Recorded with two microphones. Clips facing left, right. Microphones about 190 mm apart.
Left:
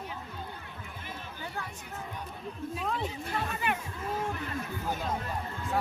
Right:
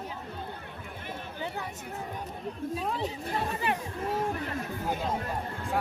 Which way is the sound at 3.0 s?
35° right (ahead or behind).